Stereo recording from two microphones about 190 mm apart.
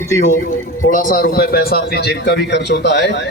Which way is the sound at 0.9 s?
45° left (ahead or behind).